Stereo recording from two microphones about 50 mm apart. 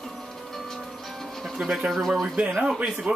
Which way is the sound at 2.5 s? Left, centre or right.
Centre.